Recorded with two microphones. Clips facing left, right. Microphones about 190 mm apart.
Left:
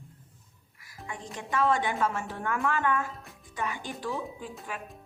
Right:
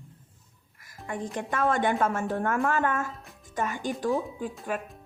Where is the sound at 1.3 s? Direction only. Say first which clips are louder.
Even; 50° right (ahead or behind).